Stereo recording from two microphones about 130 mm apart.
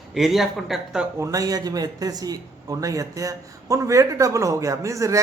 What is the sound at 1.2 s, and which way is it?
Speech, 25° right (ahead or behind).